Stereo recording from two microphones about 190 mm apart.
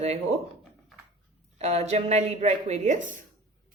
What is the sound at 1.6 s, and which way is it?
Speech, 35° right (ahead or behind).